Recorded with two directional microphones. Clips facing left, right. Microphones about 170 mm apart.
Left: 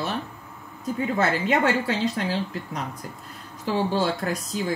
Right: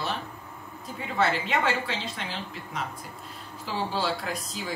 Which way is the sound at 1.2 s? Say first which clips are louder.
Left 2 dB; 45° left (ahead or behind).